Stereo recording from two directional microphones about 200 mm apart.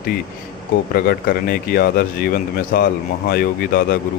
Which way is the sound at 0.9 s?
50° left (ahead or behind).